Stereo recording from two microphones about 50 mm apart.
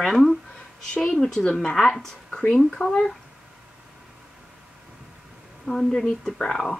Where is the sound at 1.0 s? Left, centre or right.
Centre.